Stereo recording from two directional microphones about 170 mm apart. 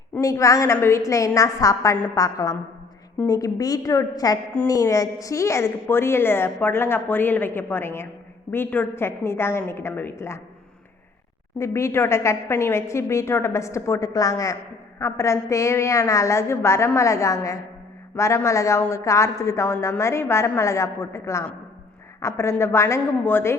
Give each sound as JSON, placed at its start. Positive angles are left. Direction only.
{"t": 0.1, "sound": "a woman's voice", "side_deg": 20}
{"t": 11.6, "sound": "a woman's voice", "side_deg": 15}